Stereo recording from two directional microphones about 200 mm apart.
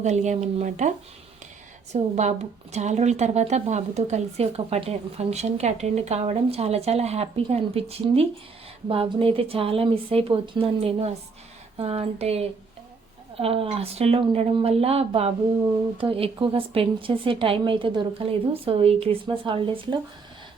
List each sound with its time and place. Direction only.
0.0 s a woman's voice: 35° right (ahead or behind)